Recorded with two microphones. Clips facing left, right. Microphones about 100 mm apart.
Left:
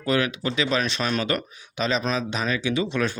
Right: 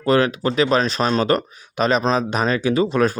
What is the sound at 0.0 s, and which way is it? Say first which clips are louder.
Speech: right 6 dB; 40° right (ahead or behind).